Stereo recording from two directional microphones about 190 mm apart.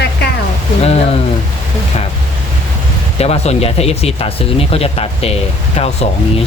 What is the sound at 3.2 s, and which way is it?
Speech, 35° left (ahead or behind).